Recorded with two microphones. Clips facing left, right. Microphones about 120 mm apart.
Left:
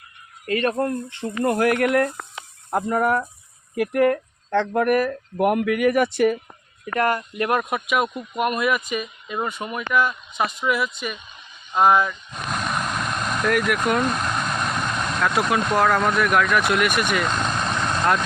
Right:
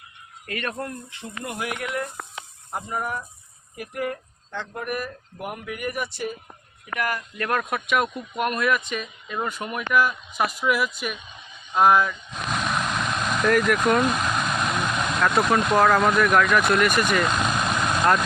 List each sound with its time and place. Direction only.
0.4 s speech: 30° left (ahead or behind)
1.5 s speech: 55° left (ahead or behind)
2.7 s speech: 75° left (ahead or behind)
6.9 s speech: 30° left (ahead or behind)
7.3 s speech: 15° left (ahead or behind)
7.6 s speech: 5° left (ahead or behind)
11.7 s vehicle: centre (ahead or behind)